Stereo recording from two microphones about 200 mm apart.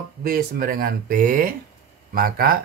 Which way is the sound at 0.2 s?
45° right (ahead or behind).